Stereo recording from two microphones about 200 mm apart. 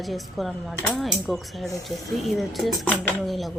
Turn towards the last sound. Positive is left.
turn(degrees=0)  # may be behind; listen again after turning